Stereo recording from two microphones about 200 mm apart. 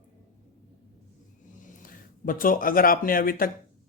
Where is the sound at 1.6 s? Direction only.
45° left (ahead or behind).